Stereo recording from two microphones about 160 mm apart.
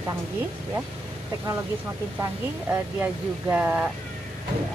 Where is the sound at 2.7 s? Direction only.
10° right (ahead or behind).